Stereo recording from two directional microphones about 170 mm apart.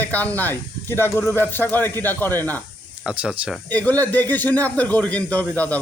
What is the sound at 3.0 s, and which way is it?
Speech, 5° right (ahead or behind).